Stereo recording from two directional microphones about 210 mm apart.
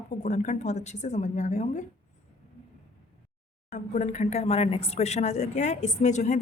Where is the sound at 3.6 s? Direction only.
35° left (ahead or behind).